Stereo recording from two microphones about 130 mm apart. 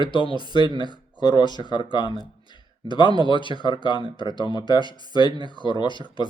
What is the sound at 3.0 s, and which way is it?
Speech, 35° right (ahead or behind).